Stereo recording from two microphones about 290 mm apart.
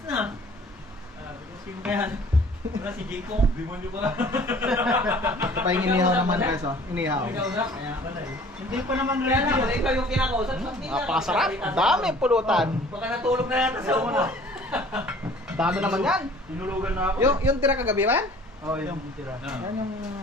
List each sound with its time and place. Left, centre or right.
1.8 s a man's voice: centre
3.3 s speech: right
4.0 s a man's voice: centre